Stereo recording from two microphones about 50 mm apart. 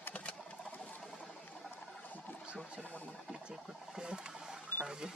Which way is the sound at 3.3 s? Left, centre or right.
Centre.